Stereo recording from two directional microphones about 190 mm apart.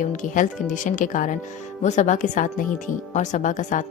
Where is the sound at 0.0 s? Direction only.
40° left (ahead or behind).